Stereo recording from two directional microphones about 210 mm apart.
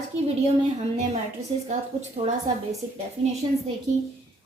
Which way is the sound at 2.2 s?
30° right (ahead or behind).